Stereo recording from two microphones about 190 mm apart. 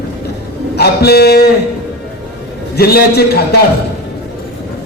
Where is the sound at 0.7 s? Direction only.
55° left (ahead or behind).